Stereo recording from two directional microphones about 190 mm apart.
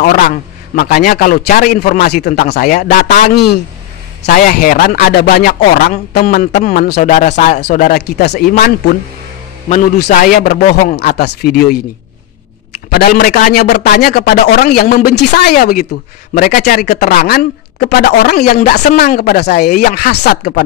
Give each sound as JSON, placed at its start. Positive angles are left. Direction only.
{"t": 0.0, "sound": "a man's voice", "side_deg": 50}
{"t": 2.7, "sound": "a man's voice", "side_deg": 45}
{"t": 4.3, "sound": "a man's voice", "side_deg": 45}
{"t": 7.0, "sound": "speech", "side_deg": 40}
{"t": 7.9, "sound": "speech", "side_deg": 60}
{"t": 9.9, "sound": "a man's voice", "side_deg": 50}
{"t": 12.9, "sound": "a man's voice", "side_deg": 50}